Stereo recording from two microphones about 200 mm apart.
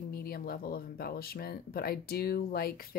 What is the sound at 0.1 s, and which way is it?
Speech, 50° left (ahead or behind).